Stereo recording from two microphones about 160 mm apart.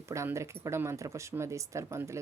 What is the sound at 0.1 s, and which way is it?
Speech, 20° right (ahead or behind).